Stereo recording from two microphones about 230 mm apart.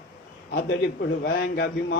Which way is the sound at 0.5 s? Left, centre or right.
Left.